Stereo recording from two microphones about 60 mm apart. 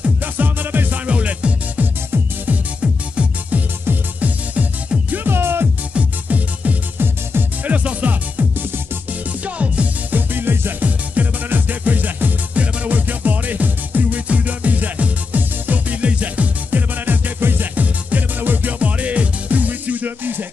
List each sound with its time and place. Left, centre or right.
0.0 s music: right
5.1 s music: right
5.9 s music: right
10.3 s music: right